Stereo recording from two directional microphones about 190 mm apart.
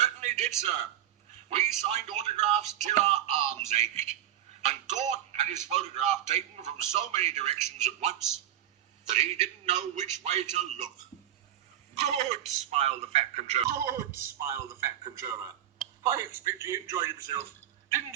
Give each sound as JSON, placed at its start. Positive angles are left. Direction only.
{"t": 0.0, "sound": "a sound", "side_deg": -35}
{"t": 1.5, "sound": "a man's voice", "side_deg": -35}
{"t": 11.9, "sound": "a man's voice", "side_deg": -35}
{"t": 13.7, "sound": "speech", "side_deg": -15}